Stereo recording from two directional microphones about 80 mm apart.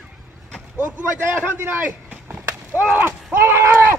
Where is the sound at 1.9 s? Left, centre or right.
Centre.